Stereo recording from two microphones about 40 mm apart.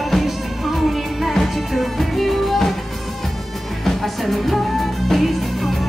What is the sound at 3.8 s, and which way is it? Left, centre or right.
Music, centre.